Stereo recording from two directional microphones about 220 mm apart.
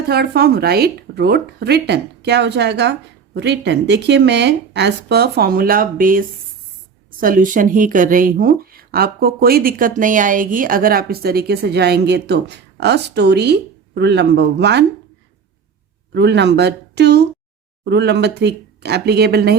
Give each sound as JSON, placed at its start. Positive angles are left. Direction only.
{"t": 0.1, "sound": "speech", "side_deg": -45}
{"t": 16.1, "sound": "speech", "side_deg": -50}